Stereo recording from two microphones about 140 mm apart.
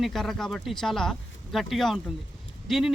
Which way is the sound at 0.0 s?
Centre (ahead or behind).